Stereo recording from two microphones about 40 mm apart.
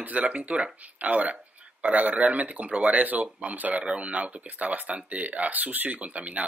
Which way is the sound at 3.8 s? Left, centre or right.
Right.